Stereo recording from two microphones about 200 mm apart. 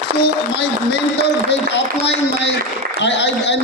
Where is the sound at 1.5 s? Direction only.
60° left (ahead or behind).